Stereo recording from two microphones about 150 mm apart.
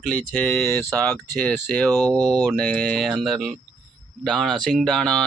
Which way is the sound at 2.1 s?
25° right (ahead or behind).